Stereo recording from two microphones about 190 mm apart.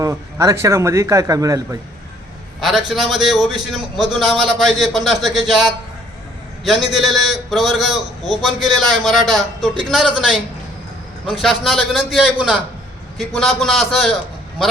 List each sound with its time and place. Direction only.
0.0 s speech: 15° right (ahead or behind)
2.6 s a man's voice: centre (ahead or behind)